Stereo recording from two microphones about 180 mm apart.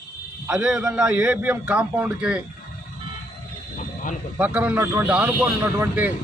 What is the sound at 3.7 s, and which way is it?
Snake, 45° left (ahead or behind).